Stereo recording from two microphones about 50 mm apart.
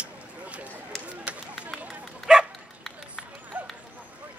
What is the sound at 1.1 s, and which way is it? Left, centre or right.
Run, right.